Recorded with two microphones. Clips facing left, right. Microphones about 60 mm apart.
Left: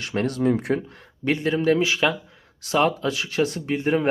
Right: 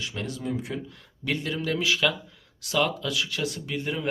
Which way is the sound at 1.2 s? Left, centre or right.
Left.